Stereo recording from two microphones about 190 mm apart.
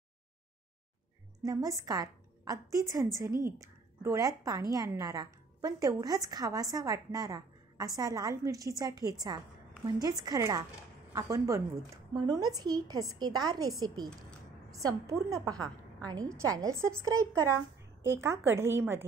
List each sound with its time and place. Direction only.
1.4 s a woman's voice: 20° right (ahead or behind)